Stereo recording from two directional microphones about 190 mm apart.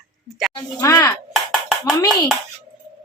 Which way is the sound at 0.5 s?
15° left (ahead or behind).